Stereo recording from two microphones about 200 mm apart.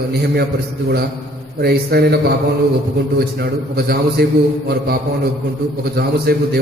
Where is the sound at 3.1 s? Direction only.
50° right (ahead or behind).